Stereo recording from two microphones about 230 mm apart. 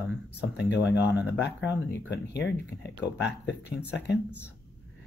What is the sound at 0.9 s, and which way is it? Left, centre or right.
Speech, left.